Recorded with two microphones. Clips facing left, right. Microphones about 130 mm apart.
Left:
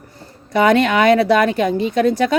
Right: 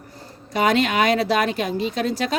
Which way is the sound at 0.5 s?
60° left (ahead or behind).